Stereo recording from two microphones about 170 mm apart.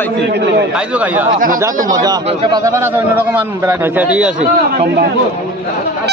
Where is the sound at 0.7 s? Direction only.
10° right (ahead or behind).